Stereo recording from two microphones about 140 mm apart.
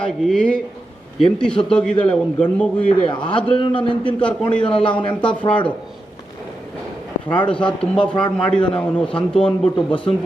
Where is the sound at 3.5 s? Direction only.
40° left (ahead or behind).